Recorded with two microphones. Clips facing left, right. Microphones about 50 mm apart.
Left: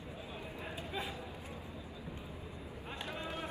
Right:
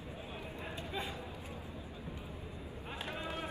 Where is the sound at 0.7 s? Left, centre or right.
Centre.